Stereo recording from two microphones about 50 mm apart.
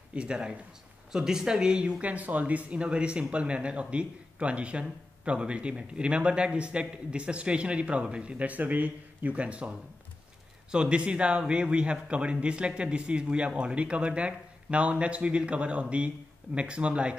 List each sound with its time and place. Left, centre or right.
0.1 s speech: right